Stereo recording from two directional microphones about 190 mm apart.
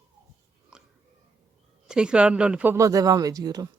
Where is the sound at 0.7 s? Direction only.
5° right (ahead or behind).